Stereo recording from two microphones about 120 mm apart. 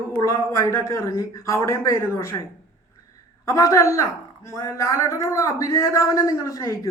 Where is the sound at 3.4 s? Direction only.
25° left (ahead or behind).